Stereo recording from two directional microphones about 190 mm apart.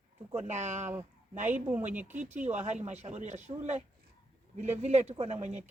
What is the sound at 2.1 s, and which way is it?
Speech, 40° right (ahead or behind).